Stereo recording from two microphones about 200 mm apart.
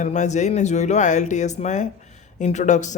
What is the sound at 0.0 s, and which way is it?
Speech, 35° left (ahead or behind).